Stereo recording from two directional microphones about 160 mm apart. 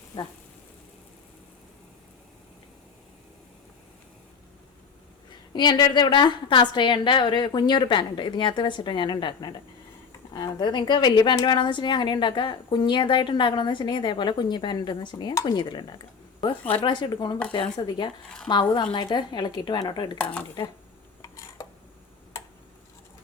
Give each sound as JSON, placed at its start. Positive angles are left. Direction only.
{"t": 5.5, "sound": "a woman's voice", "side_deg": 25}
{"t": 20.1, "sound": "speech", "side_deg": 10}
{"t": 21.2, "sound": "a sound", "side_deg": 20}